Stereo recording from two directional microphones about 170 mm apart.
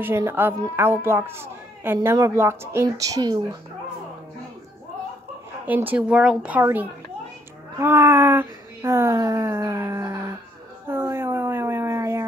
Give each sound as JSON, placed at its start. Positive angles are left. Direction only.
{"t": 0.0, "sound": "a woman's voice", "side_deg": -15}
{"t": 5.7, "sound": "a woman's voice", "side_deg": -10}
{"t": 10.9, "sound": "a sound", "side_deg": -15}